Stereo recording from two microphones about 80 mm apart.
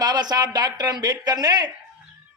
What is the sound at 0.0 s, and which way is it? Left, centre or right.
Speech, right.